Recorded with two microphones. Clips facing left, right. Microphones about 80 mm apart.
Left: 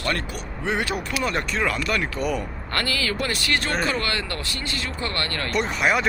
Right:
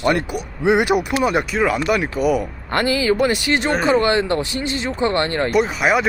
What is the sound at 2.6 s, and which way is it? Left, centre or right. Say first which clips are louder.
Speech: right 9 dB; right.